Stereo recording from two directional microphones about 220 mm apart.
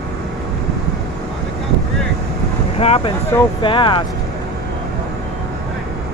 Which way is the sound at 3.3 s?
10° left (ahead or behind).